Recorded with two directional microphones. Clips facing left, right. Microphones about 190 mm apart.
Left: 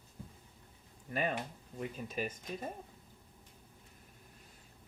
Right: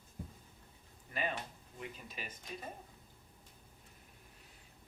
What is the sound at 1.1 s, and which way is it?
Speech, 45° left (ahead or behind).